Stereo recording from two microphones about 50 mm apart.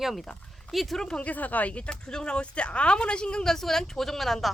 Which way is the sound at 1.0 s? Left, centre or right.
Left.